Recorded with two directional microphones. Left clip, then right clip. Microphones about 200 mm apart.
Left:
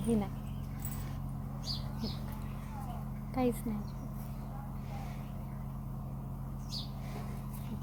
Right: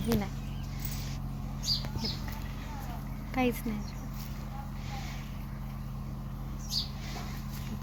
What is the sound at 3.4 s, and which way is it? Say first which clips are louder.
Speech: right 3 dB; 10° right (ahead or behind).